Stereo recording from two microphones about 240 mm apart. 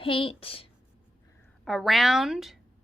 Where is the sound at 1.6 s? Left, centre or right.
Centre.